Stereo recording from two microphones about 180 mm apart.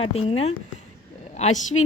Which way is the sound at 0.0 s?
35° left (ahead or behind).